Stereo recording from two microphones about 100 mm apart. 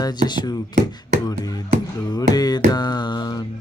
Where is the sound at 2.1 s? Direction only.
40° left (ahead or behind).